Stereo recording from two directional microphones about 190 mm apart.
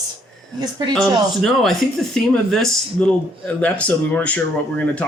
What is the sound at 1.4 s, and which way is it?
Speech, centre (ahead or behind).